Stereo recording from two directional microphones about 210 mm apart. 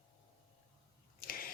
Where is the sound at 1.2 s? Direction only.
45° left (ahead or behind).